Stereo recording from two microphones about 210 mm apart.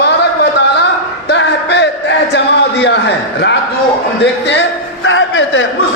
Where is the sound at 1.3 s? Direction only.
55° left (ahead or behind).